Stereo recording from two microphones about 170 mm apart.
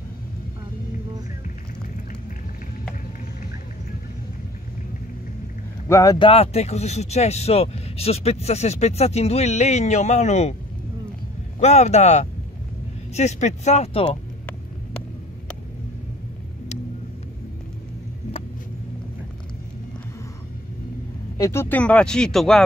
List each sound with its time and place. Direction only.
5.9 s speech: 20° left (ahead or behind)
6.2 s speech: 35° left (ahead or behind)
11.6 s speech: 40° left (ahead or behind)
21.4 s speech: 15° left (ahead or behind)